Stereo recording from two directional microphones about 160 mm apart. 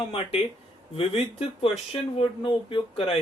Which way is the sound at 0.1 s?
35° left (ahead or behind).